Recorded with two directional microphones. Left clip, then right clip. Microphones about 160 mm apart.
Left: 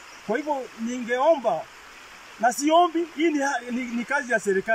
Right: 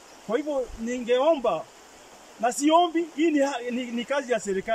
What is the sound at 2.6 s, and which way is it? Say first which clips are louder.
Speech: even; 20° right (ahead or behind).